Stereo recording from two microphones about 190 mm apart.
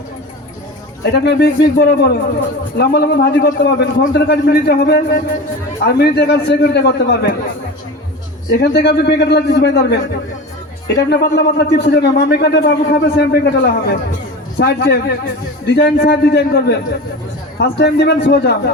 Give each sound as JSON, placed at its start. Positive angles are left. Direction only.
{"t": 1.1, "sound": "a man's voice", "side_deg": 60}
{"t": 8.4, "sound": "a man's voice", "side_deg": 55}